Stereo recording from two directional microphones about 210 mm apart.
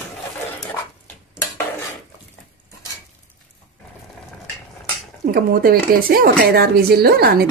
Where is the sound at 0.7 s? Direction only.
10° left (ahead or behind).